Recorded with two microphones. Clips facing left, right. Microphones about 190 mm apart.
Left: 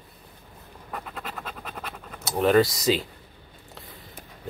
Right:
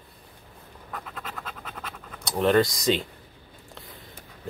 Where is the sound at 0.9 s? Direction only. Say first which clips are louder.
Left 2 dB; 15° left (ahead or behind).